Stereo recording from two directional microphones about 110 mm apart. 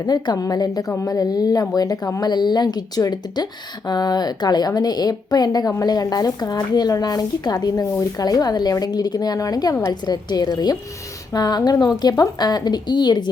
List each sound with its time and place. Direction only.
0.0 s speech: 35° left (ahead or behind)